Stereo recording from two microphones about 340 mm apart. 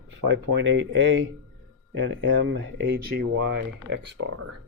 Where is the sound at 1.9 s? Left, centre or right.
Right.